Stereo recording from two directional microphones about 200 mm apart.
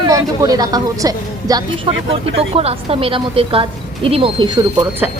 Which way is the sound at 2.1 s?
30° right (ahead or behind).